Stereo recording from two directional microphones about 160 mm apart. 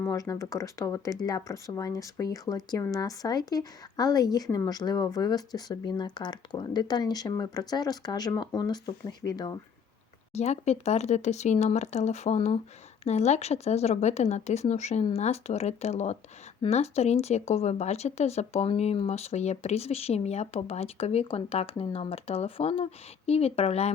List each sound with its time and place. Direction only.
0.0 s speech: 20° left (ahead or behind)
10.3 s a woman's voice: 40° left (ahead or behind)